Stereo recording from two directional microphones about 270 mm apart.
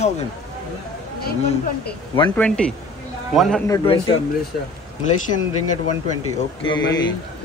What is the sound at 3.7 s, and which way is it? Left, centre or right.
Speech, centre.